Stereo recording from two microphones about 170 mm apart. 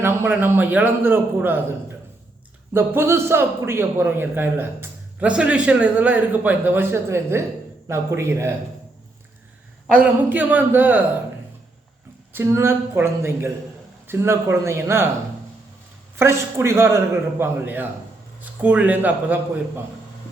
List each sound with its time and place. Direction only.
0.0 s a man's voice: 10° right (ahead or behind)
2.7 s a man's voice: 15° right (ahead or behind)
9.8 s a man's voice: 5° right (ahead or behind)
12.3 s a man's voice: 15° right (ahead or behind)
16.1 s a man's voice: 15° right (ahead or behind)